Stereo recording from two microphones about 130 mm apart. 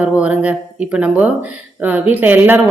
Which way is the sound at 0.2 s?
10° right (ahead or behind).